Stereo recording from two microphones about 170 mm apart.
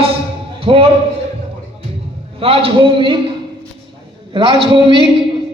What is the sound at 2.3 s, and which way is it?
Speech, 35° right (ahead or behind).